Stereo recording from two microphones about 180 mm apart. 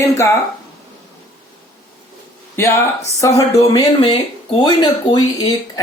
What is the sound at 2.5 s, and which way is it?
A woman's voice, 15° left (ahead or behind).